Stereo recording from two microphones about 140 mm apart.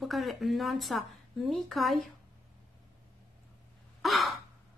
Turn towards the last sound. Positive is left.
turn(degrees=0)  # may be behind; listen again after turning